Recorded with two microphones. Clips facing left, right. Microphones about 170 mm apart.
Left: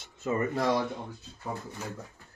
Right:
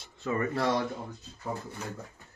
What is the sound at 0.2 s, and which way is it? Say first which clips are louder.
Speech: left 1 dB; 20° left (ahead or behind).